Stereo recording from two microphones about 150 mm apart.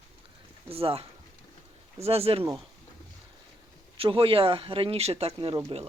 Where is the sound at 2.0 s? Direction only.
40° right (ahead or behind).